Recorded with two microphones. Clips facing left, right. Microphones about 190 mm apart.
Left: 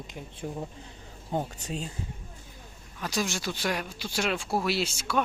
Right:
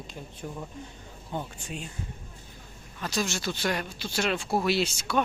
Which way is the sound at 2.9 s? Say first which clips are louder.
Even; 10° left (ahead or behind).